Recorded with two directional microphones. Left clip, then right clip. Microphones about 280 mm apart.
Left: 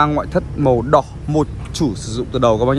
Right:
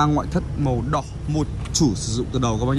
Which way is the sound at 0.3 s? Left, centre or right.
Centre.